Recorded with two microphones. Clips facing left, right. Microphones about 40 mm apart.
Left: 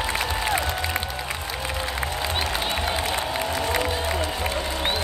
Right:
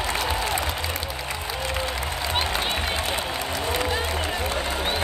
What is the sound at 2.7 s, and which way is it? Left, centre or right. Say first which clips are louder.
Crowd: left 1 dB; centre.